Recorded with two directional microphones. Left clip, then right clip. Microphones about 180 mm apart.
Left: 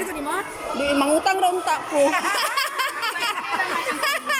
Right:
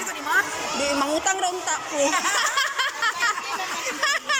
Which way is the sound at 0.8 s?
10° left (ahead or behind).